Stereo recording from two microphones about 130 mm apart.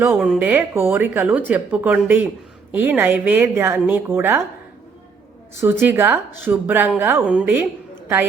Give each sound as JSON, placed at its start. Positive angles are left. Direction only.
{"t": 0.2, "sound": "a woman's voice", "side_deg": -10}
{"t": 5.5, "sound": "a woman's voice", "side_deg": -20}